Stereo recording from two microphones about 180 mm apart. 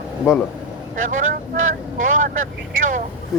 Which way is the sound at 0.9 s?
45° right (ahead or behind).